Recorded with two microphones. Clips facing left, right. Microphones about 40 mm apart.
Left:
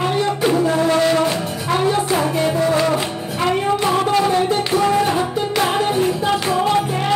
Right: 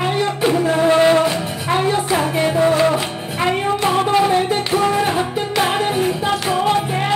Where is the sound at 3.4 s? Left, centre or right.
Centre.